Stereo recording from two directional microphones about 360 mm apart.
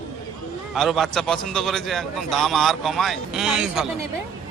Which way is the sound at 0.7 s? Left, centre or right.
Centre.